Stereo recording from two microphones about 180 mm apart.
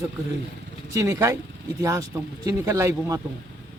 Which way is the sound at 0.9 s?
15° right (ahead or behind).